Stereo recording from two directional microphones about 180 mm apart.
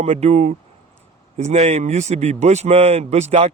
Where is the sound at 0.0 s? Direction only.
35° right (ahead or behind).